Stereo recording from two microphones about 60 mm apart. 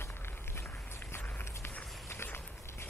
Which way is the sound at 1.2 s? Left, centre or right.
Left.